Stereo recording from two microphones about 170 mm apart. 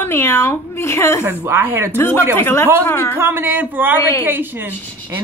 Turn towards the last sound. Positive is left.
turn(degrees=-10)  # may be behind; listen again after turning